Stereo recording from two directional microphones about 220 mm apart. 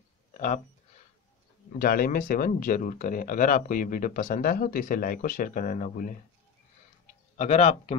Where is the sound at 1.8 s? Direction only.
40° left (ahead or behind).